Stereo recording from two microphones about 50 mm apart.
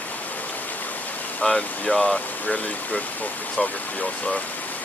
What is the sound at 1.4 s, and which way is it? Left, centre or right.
Speech, centre.